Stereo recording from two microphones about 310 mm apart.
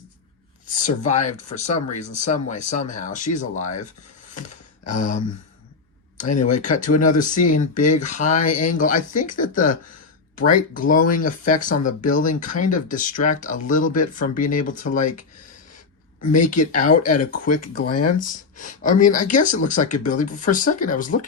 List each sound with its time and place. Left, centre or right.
0.7 s speech: left
4.4 s a sound: left
6.4 s speech: left
16.3 s speech: left
17.5 s speech: left
18.2 s speech: left